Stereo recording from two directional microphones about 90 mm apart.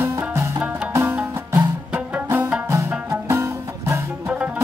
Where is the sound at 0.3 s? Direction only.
30° right (ahead or behind).